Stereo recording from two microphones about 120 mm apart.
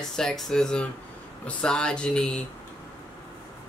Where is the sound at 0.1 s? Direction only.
5° left (ahead or behind).